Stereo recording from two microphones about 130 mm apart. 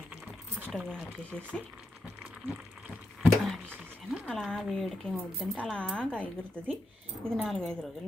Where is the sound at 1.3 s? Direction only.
10° left (ahead or behind).